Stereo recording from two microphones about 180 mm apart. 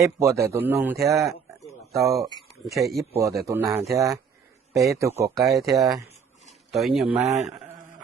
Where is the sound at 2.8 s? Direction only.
Centre (ahead or behind).